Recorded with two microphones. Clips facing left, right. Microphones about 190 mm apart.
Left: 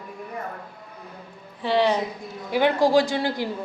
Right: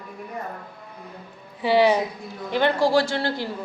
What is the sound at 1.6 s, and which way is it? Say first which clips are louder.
Speech: right 3 dB; 10° right (ahead or behind).